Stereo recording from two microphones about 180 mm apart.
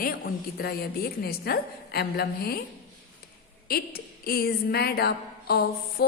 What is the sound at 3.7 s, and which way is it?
A woman's voice, 55° left (ahead or behind).